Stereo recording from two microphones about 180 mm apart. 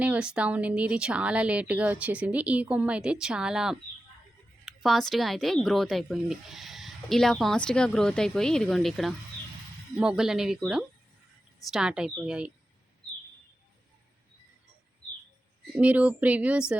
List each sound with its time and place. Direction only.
0.0 s a woman's voice: 5° right (ahead or behind)
15.7 s speech: 10° right (ahead or behind)